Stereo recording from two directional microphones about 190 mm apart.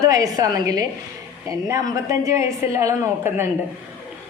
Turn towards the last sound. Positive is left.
turn(degrees=-10)  # may be behind; listen again after turning